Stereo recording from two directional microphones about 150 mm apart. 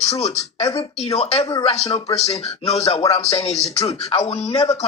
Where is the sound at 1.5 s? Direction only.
25° left (ahead or behind).